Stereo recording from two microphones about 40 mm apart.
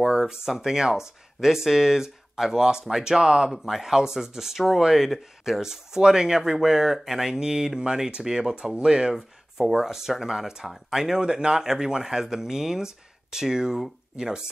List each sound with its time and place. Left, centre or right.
0.0 s speech: centre
3.5 s speech: centre
9.1 s speech: centre